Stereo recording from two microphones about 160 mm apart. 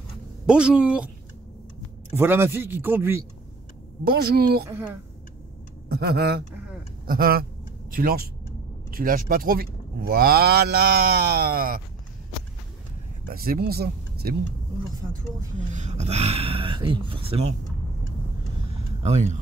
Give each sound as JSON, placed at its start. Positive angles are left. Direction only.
{"t": 0.5, "sound": "a man's voice", "side_deg": -5}
{"t": 4.0, "sound": "speech", "side_deg": -75}
{"t": 5.9, "sound": "speech", "side_deg": -80}
{"t": 7.1, "sound": "speech", "side_deg": -70}
{"t": 13.2, "sound": "speech", "side_deg": -65}
{"t": 15.7, "sound": "speech", "side_deg": -45}
{"t": 19.0, "sound": "speech", "side_deg": -45}